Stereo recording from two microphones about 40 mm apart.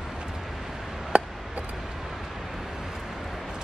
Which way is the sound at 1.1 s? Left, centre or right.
Right.